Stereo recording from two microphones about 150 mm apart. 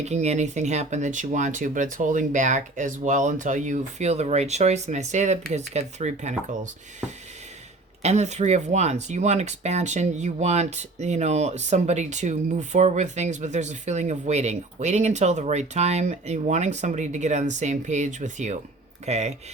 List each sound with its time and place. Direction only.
0.0 s speech: 50° right (ahead or behind)
8.0 s speech: 50° right (ahead or behind)